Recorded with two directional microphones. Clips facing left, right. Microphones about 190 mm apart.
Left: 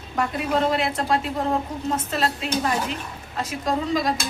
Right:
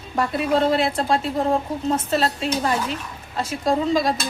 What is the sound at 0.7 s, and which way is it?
A woman's voice, 30° right (ahead or behind).